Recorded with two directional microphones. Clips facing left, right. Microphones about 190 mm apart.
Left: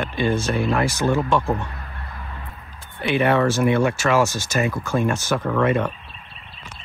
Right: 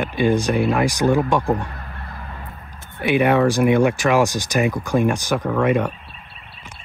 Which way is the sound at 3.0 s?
15° right (ahead or behind).